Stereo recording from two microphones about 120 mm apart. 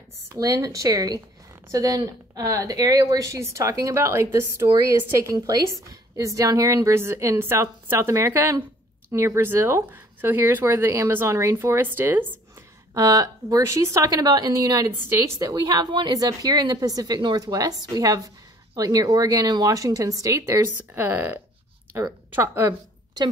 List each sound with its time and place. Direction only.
0.4 s a woman's voice: 30° right (ahead or behind)
12.9 s a woman's voice: 30° right (ahead or behind)